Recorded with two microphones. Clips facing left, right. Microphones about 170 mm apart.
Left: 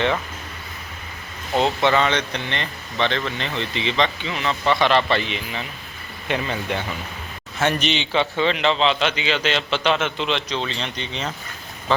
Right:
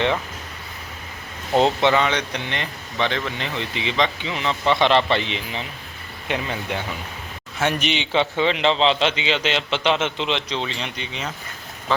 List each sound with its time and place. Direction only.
1.8 s speech: 15° right (ahead or behind)
6.2 s a man's voice: 10° right (ahead or behind)